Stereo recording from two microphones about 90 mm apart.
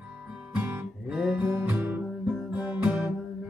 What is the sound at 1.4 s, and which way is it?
Music, 20° right (ahead or behind).